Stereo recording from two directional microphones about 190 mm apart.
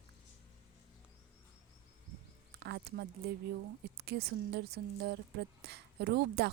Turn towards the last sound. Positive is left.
turn(degrees=-60)  # may be behind; listen again after turning